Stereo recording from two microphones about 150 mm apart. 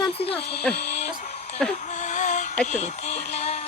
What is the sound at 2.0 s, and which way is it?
Music, 55° left (ahead or behind).